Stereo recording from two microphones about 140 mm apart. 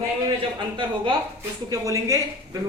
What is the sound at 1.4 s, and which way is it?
Speech, 20° right (ahead or behind).